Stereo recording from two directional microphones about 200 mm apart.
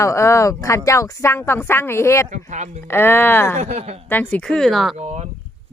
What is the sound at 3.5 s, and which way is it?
Speech, 35° right (ahead or behind).